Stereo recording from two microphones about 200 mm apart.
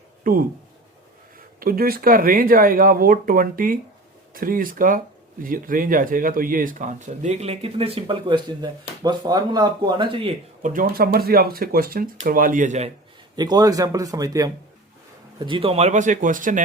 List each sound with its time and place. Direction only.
0.3 s speech: 45° right (ahead or behind)
1.5 s speech: 45° right (ahead or behind); by 10.3 s 25° right (ahead or behind)
10.6 s speech: 40° right (ahead or behind)
13.3 s a man's voice: 20° right (ahead or behind); by 16.6 s 40° right (ahead or behind)